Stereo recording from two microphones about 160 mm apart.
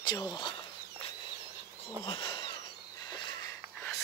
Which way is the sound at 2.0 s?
30° left (ahead or behind).